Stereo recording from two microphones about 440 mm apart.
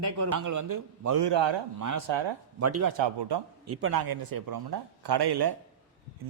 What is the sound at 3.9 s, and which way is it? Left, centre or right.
Speech, right.